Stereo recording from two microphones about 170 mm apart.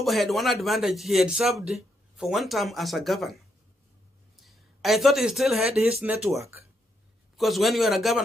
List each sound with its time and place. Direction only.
0.0 s speech: centre (ahead or behind)
7.3 s speech: centre (ahead or behind)